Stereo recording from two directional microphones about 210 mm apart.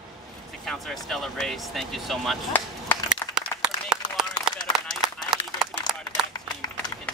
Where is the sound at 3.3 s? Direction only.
5° right (ahead or behind).